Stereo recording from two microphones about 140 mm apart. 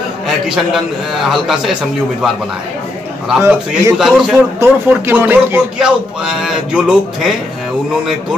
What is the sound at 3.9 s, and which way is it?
Speech, 5° right (ahead or behind).